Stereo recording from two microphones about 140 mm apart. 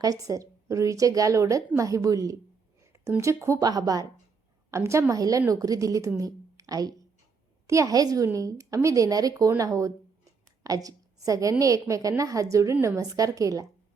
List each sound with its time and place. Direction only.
0.0 s a woman's voice: 25° right (ahead or behind)